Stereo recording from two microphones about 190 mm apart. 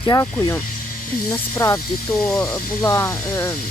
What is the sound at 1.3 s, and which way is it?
Speech, 15° left (ahead or behind).